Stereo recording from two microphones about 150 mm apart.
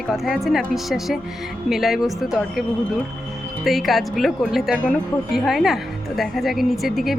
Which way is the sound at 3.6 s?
Centre (ahead or behind).